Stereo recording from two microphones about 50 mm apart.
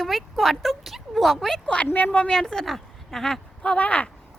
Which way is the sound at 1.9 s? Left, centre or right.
Left.